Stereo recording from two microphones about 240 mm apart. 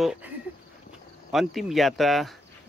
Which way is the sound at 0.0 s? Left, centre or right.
Centre.